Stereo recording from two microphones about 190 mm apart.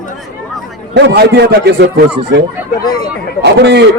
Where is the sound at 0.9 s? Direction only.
60° right (ahead or behind).